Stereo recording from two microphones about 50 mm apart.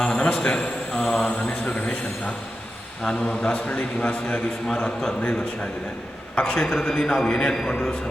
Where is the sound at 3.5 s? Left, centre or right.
Left.